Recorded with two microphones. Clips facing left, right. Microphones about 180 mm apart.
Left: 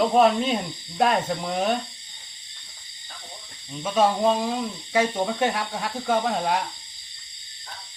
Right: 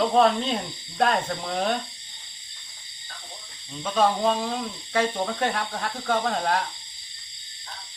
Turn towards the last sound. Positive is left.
turn(degrees=10)  # may be behind; listen again after turning